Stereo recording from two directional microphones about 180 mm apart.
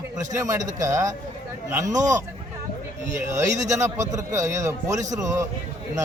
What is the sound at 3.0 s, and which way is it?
Speech, 40° right (ahead or behind).